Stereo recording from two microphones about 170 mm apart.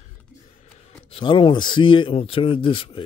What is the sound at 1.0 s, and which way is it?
Speech, 30° left (ahead or behind).